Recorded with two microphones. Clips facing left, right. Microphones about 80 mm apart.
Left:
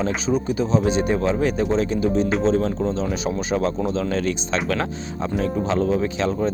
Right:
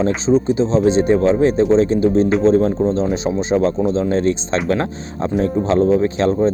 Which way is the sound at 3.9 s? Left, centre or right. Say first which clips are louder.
Right 6 dB; right.